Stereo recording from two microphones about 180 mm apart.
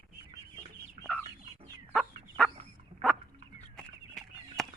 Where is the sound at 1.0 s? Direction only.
40° right (ahead or behind).